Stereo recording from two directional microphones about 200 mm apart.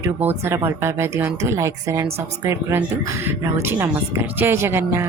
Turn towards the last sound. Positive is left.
turn(degrees=-10)  # may be behind; listen again after turning